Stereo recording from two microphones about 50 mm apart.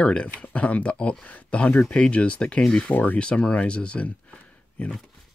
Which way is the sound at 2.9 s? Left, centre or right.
Left.